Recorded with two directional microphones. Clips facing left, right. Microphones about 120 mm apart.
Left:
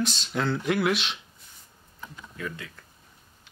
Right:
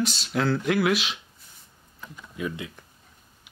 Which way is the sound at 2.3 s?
15° right (ahead or behind).